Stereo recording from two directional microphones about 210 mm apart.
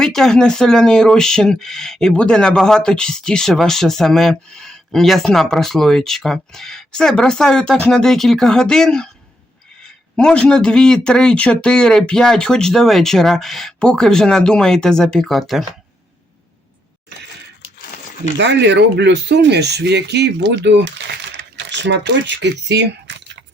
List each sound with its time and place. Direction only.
0.0 s speech: centre (ahead or behind)
18.3 s speech: 55° right (ahead or behind)